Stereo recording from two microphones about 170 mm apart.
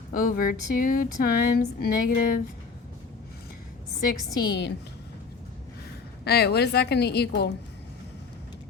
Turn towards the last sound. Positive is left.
turn(degrees=75)  # may be behind; listen again after turning